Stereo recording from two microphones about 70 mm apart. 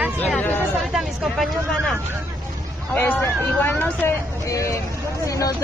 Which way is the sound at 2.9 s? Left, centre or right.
Left.